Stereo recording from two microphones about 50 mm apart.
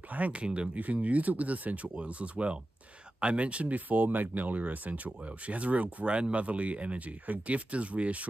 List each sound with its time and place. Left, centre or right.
0.1 s speech: right